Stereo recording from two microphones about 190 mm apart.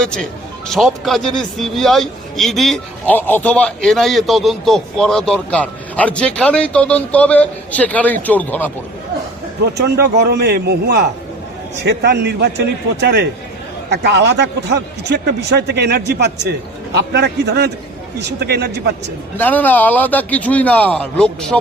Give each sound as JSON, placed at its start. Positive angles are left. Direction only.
{"t": 0.0, "sound": "a man's voice", "side_deg": 5}
{"t": 9.7, "sound": "a man's voice", "side_deg": -60}
{"t": 19.4, "sound": "a man's voice", "side_deg": 10}